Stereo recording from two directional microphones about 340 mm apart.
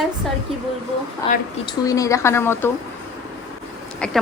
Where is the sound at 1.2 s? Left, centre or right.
Centre.